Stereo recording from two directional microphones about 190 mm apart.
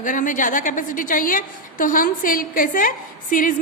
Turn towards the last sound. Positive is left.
turn(degrees=45)  # may be behind; listen again after turning